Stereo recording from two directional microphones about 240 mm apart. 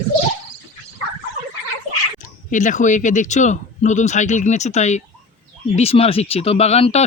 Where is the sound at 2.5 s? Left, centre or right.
Left.